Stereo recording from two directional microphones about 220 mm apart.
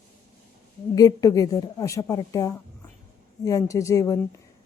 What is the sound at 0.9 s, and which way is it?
Speech, 15° left (ahead or behind).